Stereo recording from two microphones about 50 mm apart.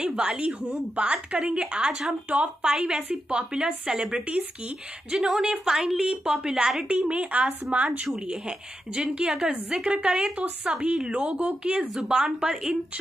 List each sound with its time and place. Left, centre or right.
0.0 s a woman's voice: centre
10.3 s a woman's voice: right